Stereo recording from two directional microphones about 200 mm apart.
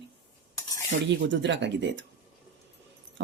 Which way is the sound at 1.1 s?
60° right (ahead or behind).